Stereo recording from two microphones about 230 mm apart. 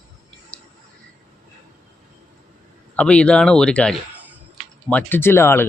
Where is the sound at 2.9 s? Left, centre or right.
Centre.